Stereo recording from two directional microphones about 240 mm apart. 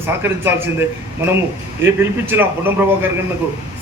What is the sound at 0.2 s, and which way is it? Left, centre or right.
A man's voice, centre.